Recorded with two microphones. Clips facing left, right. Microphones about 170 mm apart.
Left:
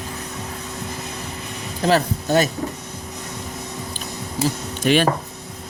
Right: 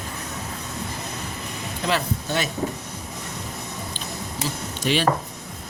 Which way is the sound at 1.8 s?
40° left (ahead or behind).